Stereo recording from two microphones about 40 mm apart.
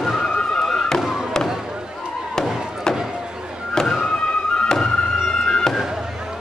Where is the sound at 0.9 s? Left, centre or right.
Centre.